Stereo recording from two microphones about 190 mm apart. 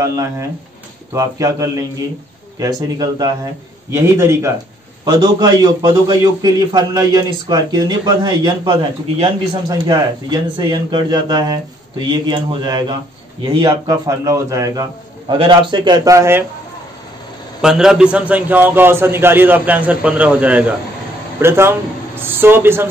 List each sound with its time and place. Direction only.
0.0 s a man's voice: 15° right (ahead or behind)
17.6 s a man's voice: 5° right (ahead or behind)